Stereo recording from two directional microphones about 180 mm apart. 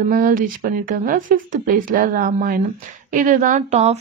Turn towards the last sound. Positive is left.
turn(degrees=-40)  # may be behind; listen again after turning